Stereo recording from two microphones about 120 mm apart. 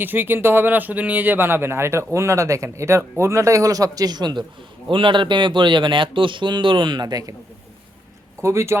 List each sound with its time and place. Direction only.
0.0 s speech: 15° right (ahead or behind); by 7.3 s 30° right (ahead or behind)
8.4 s speech: 25° right (ahead or behind)